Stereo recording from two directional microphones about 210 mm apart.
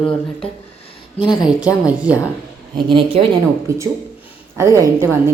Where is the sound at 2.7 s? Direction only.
25° right (ahead or behind).